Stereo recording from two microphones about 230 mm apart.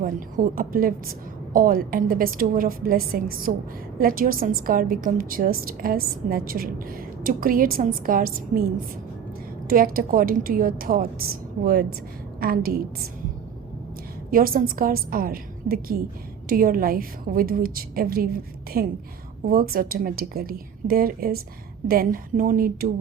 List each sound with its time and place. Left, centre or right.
0.0 s a woman's voice: right
9.6 s a woman's voice: right
14.3 s a woman's voice: right